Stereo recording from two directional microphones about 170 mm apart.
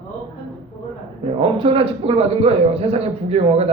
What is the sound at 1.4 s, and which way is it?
Speech, 35° right (ahead or behind).